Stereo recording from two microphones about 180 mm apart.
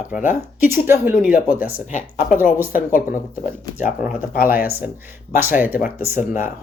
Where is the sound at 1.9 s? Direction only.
45° left (ahead or behind).